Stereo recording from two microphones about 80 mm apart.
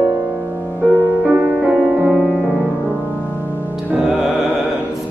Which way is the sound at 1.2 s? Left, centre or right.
Centre.